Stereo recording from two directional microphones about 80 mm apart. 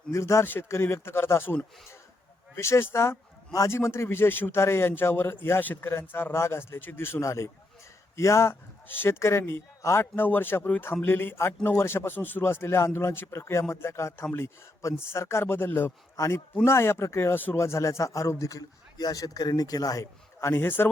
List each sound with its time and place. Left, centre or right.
0.1 s a man's voice: left
2.6 s a man's voice: left
16.1 s a man's voice: left
16.6 s a man's voice: left
20.5 s a man's voice: left